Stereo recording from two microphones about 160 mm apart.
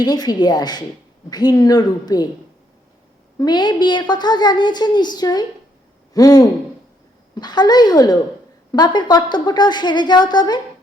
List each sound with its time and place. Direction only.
0.0 s a woman's voice: 25° left (ahead or behind)
3.3 s a woman's voice: 25° left (ahead or behind)